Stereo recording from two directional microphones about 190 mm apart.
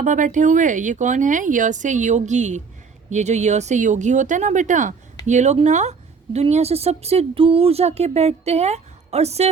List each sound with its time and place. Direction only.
0.0 s a woman's voice: 40° right (ahead or behind)